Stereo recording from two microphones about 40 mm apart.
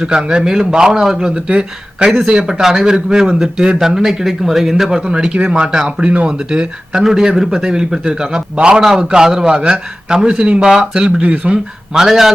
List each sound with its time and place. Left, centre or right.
0.0 s speech: right
1.5 s speech: right
2.5 s speech: centre
5.0 s speech: right
9.6 s speech: right
11.5 s speech: centre